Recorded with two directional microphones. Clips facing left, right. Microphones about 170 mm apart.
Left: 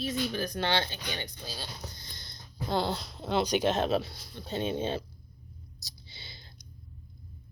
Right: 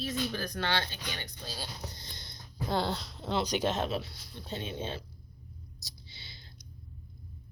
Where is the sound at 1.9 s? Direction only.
25° right (ahead or behind).